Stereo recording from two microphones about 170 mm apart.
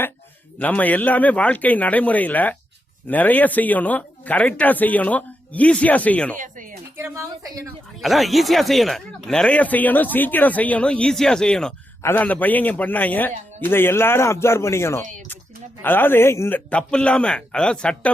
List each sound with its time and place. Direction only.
0.6 s speech: 10° left (ahead or behind)
6.3 s speech: 50° right (ahead or behind)
6.9 s speech: 15° right (ahead or behind)
8.0 s speech: centre (ahead or behind)